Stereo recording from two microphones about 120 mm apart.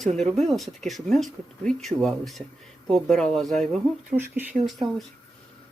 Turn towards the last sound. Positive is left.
turn(degrees=0)  # may be behind; listen again after turning